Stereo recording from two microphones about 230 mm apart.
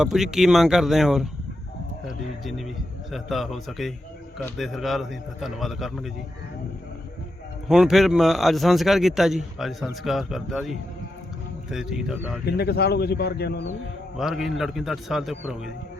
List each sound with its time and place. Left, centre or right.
0.0 s a man's voice: centre
2.0 s a sound: centre
4.4 s a man's voice: centre
7.7 s a man's voice: centre
12.5 s speech: left
14.2 s a man's voice: centre